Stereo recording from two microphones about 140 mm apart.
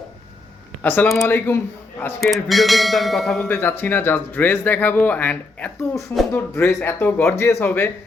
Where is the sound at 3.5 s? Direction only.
15° left (ahead or behind).